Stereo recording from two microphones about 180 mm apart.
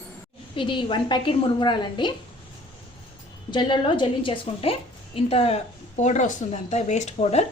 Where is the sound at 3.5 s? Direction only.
25° left (ahead or behind).